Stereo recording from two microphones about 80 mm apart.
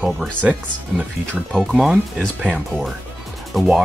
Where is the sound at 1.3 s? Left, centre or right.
Centre.